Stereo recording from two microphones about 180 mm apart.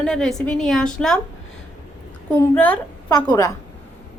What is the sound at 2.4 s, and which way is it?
Speech, 10° left (ahead or behind).